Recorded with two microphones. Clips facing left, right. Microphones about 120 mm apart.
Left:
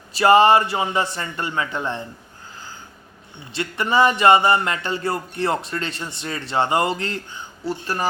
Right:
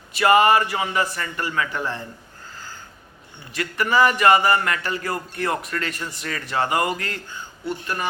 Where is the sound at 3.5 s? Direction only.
25° left (ahead or behind).